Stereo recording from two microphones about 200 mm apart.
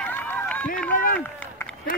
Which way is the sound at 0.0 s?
10° left (ahead or behind).